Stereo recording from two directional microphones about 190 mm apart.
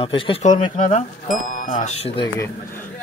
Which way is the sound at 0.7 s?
40° left (ahead or behind).